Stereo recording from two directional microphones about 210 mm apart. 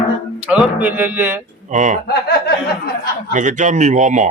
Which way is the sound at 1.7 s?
35° right (ahead or behind).